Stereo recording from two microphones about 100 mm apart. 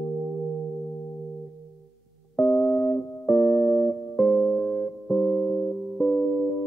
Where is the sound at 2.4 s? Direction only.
20° left (ahead or behind).